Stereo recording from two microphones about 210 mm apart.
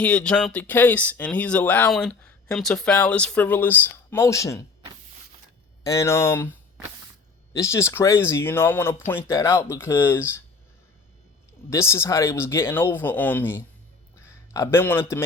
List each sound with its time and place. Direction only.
0.0 s speech: 5° left (ahead or behind)
5.8 s speech: 15° left (ahead or behind)
11.7 s speech: 15° left (ahead or behind)